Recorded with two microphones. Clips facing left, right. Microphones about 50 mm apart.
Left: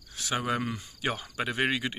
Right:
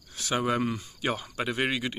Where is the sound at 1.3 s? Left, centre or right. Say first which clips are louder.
Left 3 dB; centre.